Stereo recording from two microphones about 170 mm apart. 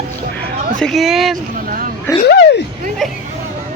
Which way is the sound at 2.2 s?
80° left.